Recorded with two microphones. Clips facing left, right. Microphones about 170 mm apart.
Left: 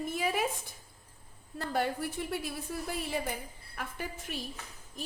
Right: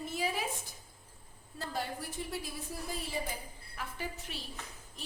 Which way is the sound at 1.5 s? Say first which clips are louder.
Left 6 dB; 65° left (ahead or behind).